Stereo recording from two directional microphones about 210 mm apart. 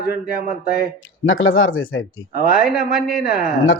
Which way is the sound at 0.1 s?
45° left (ahead or behind).